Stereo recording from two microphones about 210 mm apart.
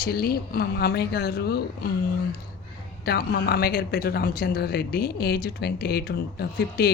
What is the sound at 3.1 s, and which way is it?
Speech, 50° left (ahead or behind).